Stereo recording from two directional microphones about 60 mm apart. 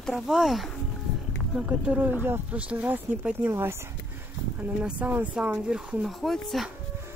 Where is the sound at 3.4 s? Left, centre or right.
Right.